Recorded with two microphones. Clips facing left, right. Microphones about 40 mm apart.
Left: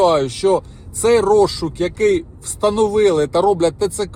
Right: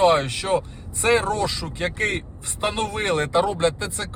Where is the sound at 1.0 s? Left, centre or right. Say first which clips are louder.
Left 8 dB; right.